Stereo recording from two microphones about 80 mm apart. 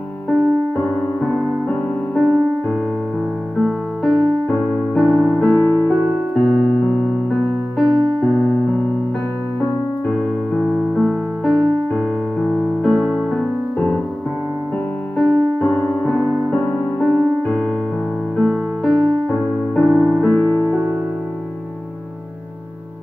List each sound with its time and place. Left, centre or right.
1.7 s music: centre
3.6 s music: centre
4.9 s keyboard: centre
7.9 s keyboard: right
8.2 s electric piano: centre
10.0 s music: centre
10.7 s music: centre
15.1 s keyboard: left
18.4 s music: centre